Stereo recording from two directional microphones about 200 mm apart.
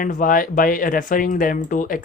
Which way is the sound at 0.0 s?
45° left (ahead or behind).